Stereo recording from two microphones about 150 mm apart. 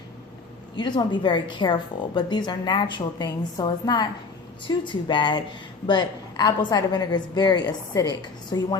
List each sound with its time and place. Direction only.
0.8 s a woman's voice: 30° left (ahead or behind)